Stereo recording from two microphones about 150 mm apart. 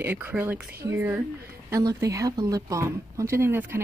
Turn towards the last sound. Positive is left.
turn(degrees=-15)  # may be behind; listen again after turning